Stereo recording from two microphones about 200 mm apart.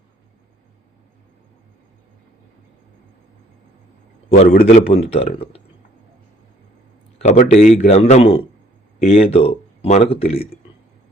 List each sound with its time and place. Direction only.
4.3 s a man's voice: 35° left (ahead or behind)
7.2 s speech: 35° left (ahead or behind)